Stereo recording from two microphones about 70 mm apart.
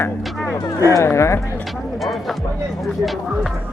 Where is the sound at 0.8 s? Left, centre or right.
Left.